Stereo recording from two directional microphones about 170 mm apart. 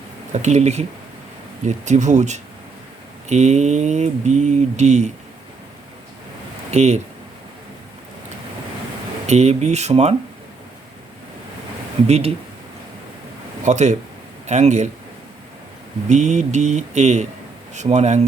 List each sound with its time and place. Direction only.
0.3 s speech: 40° right (ahead or behind)
6.7 s speech: 40° right (ahead or behind)
9.2 s speech: 40° right (ahead or behind)
12.0 s speech: 40° right (ahead or behind)
13.7 s speech: 45° right (ahead or behind)
16.0 s speech: 45° right (ahead or behind)